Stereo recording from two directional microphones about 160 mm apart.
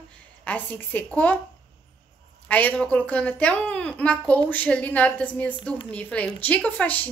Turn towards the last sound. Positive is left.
turn(degrees=10)  # may be behind; listen again after turning